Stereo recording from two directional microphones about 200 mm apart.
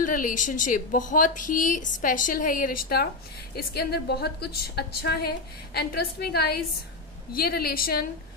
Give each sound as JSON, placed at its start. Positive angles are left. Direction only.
{"t": 0.0, "sound": "a woman's voice", "side_deg": 40}